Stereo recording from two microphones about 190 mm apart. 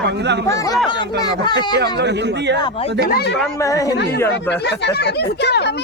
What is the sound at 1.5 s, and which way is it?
Speech, 60° right (ahead or behind).